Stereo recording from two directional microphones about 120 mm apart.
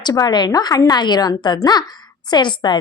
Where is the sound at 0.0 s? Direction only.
35° left (ahead or behind).